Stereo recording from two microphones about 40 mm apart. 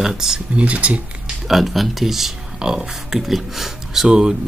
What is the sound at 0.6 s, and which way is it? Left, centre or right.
Speech, right.